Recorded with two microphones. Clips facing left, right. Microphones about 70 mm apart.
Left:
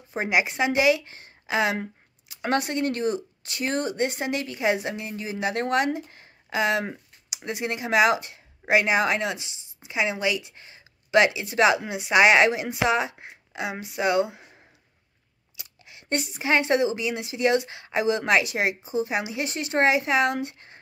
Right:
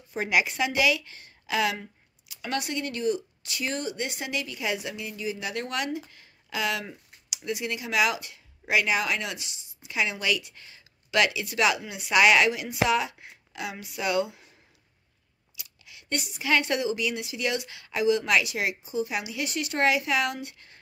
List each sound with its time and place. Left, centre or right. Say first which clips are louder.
0.1 s a woman's voice: left 2 dB; left
15.5 s speech: left 1 dB; left